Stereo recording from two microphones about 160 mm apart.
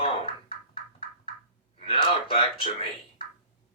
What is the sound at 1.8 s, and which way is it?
Speech, 35° left (ahead or behind).